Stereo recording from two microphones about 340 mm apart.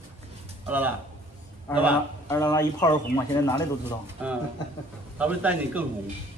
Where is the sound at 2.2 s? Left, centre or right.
Centre.